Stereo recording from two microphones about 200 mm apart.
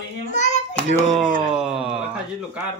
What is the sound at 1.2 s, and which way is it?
Speech, 25° right (ahead or behind).